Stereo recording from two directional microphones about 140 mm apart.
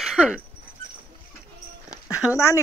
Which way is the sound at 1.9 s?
10° right (ahead or behind).